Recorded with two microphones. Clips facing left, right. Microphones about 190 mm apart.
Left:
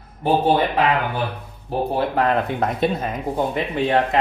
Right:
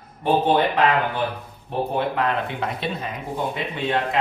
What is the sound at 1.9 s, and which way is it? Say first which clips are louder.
Speech: left 4 dB; 40° left (ahead or behind).